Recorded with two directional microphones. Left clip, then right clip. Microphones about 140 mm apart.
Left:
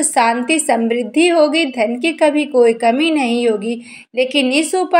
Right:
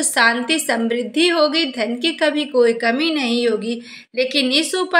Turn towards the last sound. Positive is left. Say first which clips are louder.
# left 3 dB
turn(degrees=20)  # may be behind; listen again after turning